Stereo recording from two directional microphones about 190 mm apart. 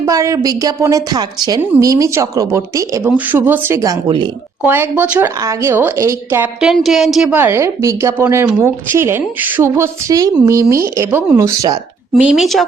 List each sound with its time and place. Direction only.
0.0 s a woman's voice: 15° right (ahead or behind)
4.6 s a woman's voice: 10° right (ahead or behind)
12.2 s speech: centre (ahead or behind)